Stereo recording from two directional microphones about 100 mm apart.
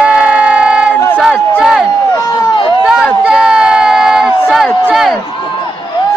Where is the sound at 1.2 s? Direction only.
5° right (ahead or behind).